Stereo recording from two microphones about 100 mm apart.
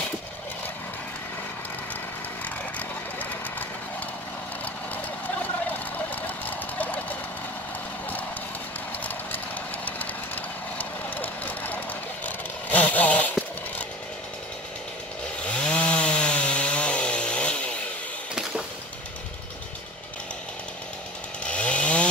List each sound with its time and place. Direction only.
5.7 s a sound: 15° left (ahead or behind)
9.8 s vehicle: 15° left (ahead or behind)
15.4 s chainsaw: 10° left (ahead or behind)
21.5 s chainsaw: 10° left (ahead or behind)